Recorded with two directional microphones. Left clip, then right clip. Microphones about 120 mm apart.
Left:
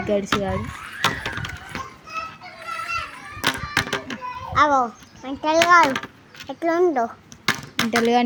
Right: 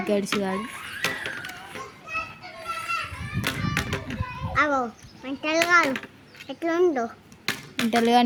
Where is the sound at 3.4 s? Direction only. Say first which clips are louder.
Left 6 dB; 85° left.